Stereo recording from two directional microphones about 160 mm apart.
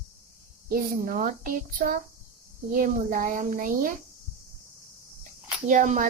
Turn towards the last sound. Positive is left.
turn(degrees=-50)  # may be behind; listen again after turning